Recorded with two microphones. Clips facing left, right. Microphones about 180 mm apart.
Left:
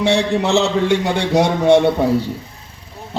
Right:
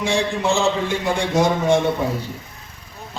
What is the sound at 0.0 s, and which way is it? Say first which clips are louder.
A man's voice: left 5 dB; 70° left (ahead or behind).